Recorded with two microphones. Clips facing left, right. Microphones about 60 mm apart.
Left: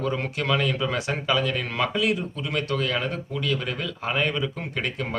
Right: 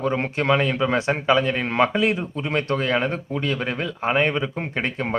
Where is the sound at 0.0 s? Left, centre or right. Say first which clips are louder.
Right 4 dB; right.